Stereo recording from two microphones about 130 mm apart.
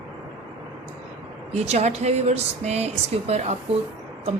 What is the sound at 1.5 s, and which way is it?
Speech, 55° right (ahead or behind).